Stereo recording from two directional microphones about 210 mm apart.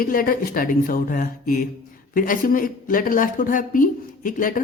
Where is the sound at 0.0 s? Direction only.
40° left (ahead or behind).